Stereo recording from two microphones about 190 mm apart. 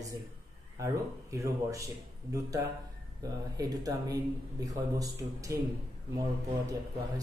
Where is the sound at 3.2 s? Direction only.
20° right (ahead or behind).